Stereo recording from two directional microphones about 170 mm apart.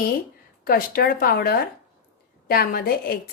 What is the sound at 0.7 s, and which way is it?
A woman's voice, 60° left (ahead or behind).